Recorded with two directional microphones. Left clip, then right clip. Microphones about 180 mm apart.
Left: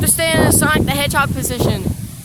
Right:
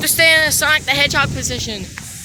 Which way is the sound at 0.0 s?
5° left (ahead or behind).